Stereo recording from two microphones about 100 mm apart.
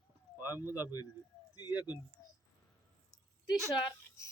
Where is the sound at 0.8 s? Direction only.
40° left (ahead or behind).